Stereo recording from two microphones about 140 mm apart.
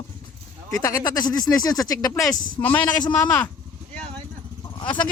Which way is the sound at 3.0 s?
30° left (ahead or behind).